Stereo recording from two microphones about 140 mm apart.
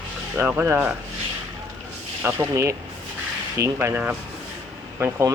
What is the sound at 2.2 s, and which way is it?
Speech, 15° right (ahead or behind).